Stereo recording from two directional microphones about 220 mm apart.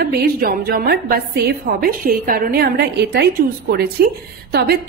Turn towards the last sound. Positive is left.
turn(degrees=-45)  # may be behind; listen again after turning